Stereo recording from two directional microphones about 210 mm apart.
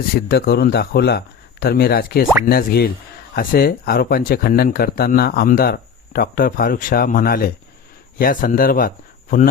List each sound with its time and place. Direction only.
0.1 s speech: 45° left (ahead or behind)